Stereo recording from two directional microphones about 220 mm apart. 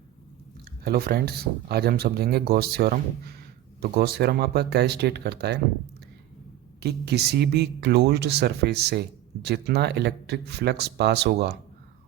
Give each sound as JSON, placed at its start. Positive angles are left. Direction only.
{"t": 0.9, "sound": "speech", "side_deg": -45}
{"t": 6.7, "sound": "speech", "side_deg": -50}